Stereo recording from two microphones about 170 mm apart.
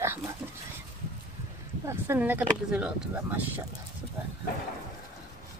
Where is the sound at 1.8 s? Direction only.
15° right (ahead or behind).